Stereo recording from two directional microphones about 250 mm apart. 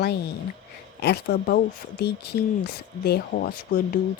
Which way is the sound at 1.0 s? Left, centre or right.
Left.